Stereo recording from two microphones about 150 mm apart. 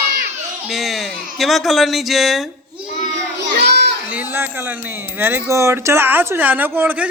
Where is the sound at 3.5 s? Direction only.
90° right.